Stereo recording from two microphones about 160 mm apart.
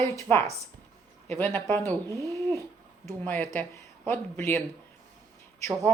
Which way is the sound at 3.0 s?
15° left (ahead or behind).